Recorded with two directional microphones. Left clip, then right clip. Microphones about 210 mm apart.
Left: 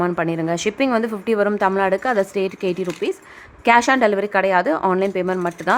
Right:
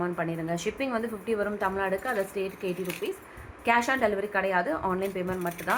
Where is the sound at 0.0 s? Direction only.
55° left (ahead or behind).